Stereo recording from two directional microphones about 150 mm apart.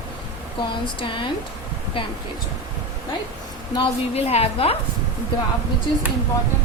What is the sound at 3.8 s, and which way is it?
A woman's voice, 45° left (ahead or behind).